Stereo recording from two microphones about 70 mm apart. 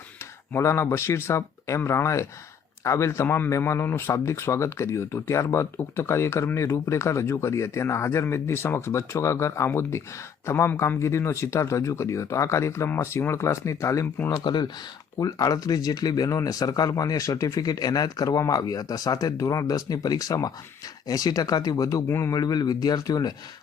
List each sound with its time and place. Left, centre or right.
0.5 s speech: left
14.3 s speech: left
15.2 s speech: left
18.3 s speech: left
18.5 s speech: left